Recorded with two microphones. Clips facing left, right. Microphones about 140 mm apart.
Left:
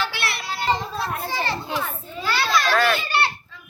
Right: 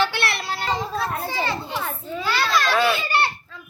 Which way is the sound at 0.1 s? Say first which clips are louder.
Right 3 dB; 55° right (ahead or behind).